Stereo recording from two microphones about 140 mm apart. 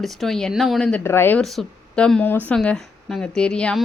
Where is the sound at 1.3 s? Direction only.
5° left (ahead or behind).